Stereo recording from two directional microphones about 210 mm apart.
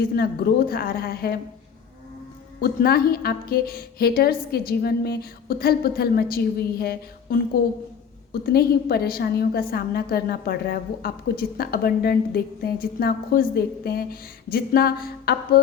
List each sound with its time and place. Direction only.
0.0 s a woman's voice: 45° left (ahead or behind)
2.6 s a woman's voice: 45° left (ahead or behind)